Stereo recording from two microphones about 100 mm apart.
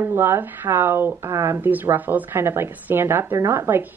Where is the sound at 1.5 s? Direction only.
20° right (ahead or behind).